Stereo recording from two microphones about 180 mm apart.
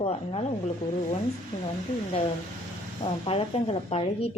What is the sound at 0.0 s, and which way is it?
Speech, 35° left (ahead or behind).